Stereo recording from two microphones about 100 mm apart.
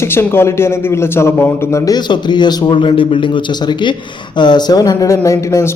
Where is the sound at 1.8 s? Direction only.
45° left (ahead or behind).